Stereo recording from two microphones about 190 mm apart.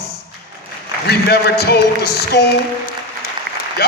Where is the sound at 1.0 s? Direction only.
60° left (ahead or behind).